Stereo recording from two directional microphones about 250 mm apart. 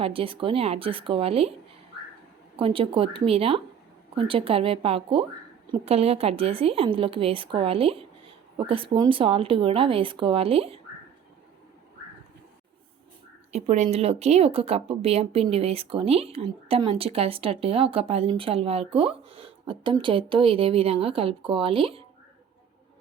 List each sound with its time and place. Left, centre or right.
0.0 s speech: right
2.6 s speech: right
13.5 s speech: right